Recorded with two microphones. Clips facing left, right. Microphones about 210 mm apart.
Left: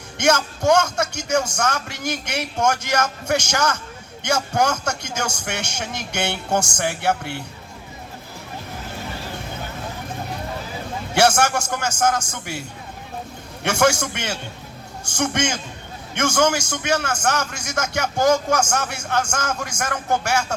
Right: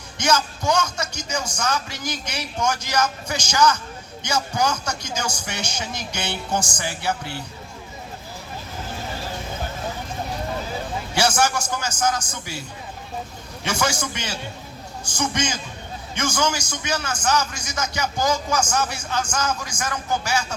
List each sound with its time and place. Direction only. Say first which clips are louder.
0.2 s a man's voice: left 3 dB; 65° left (ahead or behind)
5.1 s a man's voice: left 2 dB; 65° left (ahead or behind)
11.1 s a man's voice: left 4 dB; 65° left (ahead or behind)
13.7 s a man's voice: left 6 dB; 55° left (ahead or behind)